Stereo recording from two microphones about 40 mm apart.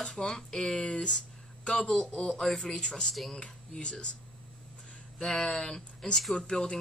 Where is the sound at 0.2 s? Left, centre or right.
Centre.